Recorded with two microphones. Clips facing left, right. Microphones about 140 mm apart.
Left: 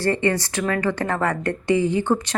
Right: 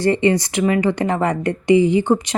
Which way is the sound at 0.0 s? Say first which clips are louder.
Right 5 dB; 15° right (ahead or behind).